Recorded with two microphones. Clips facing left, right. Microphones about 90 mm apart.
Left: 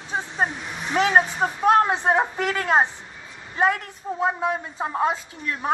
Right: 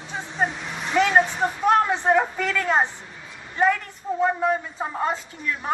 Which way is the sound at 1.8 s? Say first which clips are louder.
Right 1 dB; 20° left (ahead or behind).